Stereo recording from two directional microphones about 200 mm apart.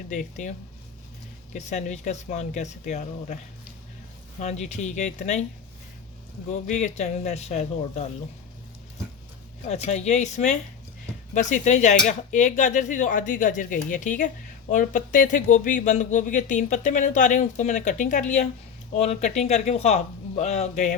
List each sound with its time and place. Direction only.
0.1 s speech: 40° left (ahead or behind)
1.5 s speech: 35° left (ahead or behind)
4.4 s speech: 35° left (ahead or behind)
6.5 s speech: 35° left (ahead or behind)
9.6 s speech: 35° left (ahead or behind)